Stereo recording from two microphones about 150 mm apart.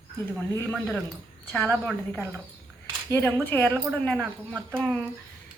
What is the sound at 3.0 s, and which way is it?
A woman's voice, 15° left (ahead or behind).